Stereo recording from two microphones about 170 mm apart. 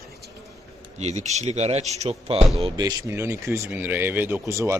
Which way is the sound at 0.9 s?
40° right (ahead or behind).